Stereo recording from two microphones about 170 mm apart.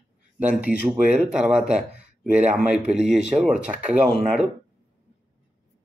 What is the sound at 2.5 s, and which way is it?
Speech, 5° right (ahead or behind).